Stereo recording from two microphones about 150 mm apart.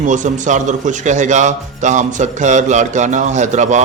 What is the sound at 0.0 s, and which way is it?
Speech, 55° right (ahead or behind).